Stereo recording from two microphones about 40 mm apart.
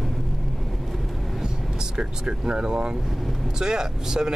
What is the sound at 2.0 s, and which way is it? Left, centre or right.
Speech, right.